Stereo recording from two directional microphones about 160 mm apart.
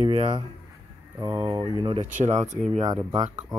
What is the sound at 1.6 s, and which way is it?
Speech, 30° right (ahead or behind).